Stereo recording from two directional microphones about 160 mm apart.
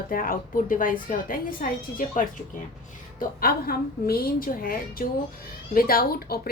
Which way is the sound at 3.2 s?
65° left (ahead or behind).